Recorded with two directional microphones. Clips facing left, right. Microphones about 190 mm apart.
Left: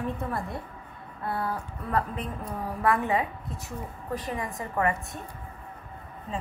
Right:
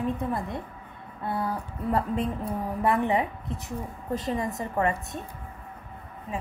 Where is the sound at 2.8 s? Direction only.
20° right (ahead or behind).